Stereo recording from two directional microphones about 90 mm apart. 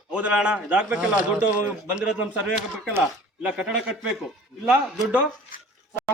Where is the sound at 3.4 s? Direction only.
10° right (ahead or behind).